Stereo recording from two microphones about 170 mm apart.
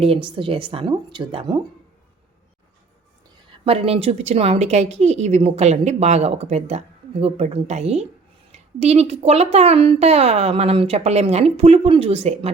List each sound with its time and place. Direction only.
0.0 s speech: 30° right (ahead or behind)
3.6 s speech: 35° right (ahead or behind)